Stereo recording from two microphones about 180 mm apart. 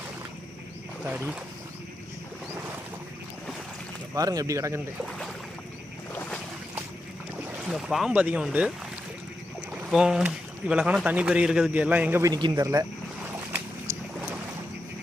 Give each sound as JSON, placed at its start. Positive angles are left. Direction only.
{"t": 1.0, "sound": "a man's voice", "side_deg": -10}
{"t": 4.1, "sound": "speech", "side_deg": -20}
{"t": 6.1, "sound": "boat", "side_deg": 5}
{"t": 7.7, "sound": "speech", "side_deg": 0}
{"t": 9.9, "sound": "a man's voice", "side_deg": -5}